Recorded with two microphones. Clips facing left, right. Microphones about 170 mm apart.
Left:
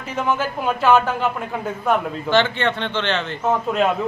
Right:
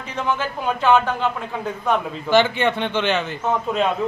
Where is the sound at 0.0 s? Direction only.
5° left (ahead or behind).